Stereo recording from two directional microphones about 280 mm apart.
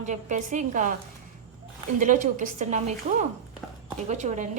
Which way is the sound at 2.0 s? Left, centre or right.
Right.